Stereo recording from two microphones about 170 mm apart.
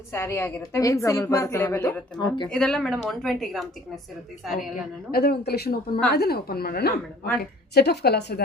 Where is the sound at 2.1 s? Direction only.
25° left (ahead or behind).